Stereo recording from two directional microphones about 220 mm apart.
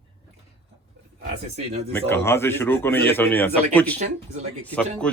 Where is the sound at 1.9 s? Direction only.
10° left (ahead or behind).